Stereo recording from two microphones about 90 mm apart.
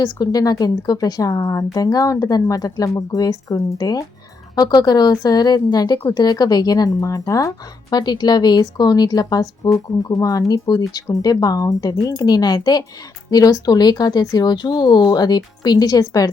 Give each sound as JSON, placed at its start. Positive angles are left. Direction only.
{"t": 0.0, "sound": "speech", "side_deg": 45}